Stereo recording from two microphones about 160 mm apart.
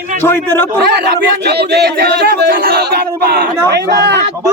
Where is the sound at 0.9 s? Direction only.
85° right.